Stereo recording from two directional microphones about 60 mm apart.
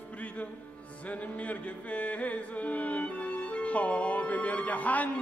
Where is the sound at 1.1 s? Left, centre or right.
Left.